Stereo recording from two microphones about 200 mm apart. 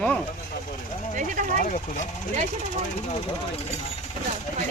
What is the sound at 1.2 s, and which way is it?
Speech, 40° right (ahead or behind).